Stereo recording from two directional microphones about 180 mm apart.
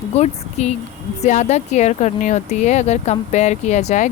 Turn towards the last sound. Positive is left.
turn(degrees=40)  # may be behind; listen again after turning